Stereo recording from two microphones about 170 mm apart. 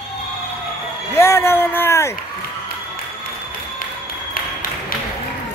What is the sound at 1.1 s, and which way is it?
Speech, 15° left (ahead or behind).